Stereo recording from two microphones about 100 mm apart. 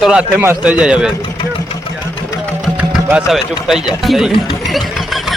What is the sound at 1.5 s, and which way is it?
Vehicle, 55° left (ahead or behind).